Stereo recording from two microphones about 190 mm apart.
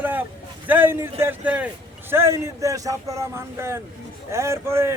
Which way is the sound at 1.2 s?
10° right (ahead or behind).